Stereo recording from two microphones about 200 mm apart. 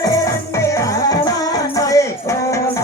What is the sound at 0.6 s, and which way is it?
Music, 15° left (ahead or behind).